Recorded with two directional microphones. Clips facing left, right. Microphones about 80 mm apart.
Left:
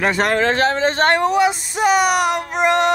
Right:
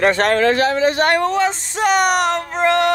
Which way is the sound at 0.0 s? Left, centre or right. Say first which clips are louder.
Right 3 dB; centre.